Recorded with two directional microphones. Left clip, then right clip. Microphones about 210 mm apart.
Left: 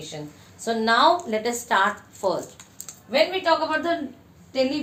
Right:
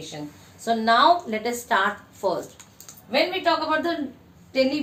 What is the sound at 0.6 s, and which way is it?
A woman's voice, 20° left (ahead or behind).